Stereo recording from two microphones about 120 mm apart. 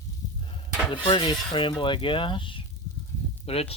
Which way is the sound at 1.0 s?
45° left (ahead or behind).